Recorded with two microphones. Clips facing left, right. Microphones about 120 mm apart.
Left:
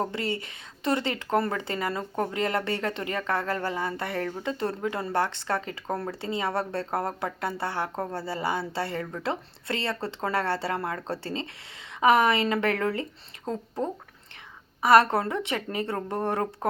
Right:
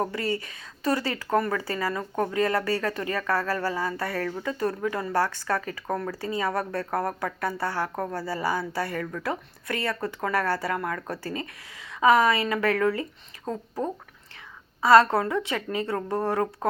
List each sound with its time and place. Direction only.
0.0 s speech: 25° left (ahead or behind)
14.8 s speech: 25° left (ahead or behind)